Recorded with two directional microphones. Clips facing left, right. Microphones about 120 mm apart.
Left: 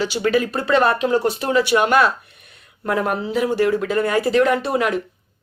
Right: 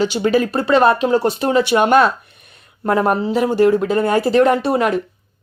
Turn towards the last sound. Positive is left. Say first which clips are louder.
# right 3 dB
turn(degrees=-35)  # may be behind; listen again after turning